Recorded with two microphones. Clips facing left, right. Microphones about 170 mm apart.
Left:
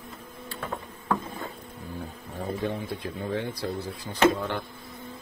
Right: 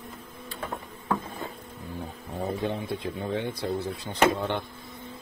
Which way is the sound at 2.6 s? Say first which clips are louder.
Right 1 dB; 20° right (ahead or behind).